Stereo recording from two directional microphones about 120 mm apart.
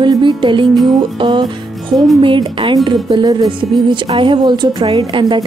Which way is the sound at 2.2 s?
45° right (ahead or behind).